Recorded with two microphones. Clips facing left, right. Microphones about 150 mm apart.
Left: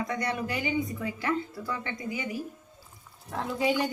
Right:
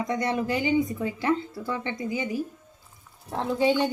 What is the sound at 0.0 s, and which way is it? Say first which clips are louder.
Speech: right 4 dB; 25° right (ahead or behind).